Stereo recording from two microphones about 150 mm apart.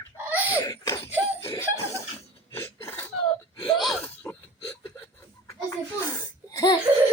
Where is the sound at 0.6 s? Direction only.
25° left (ahead or behind).